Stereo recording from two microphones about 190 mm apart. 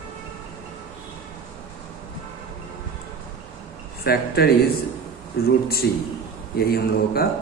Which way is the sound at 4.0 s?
55° left (ahead or behind).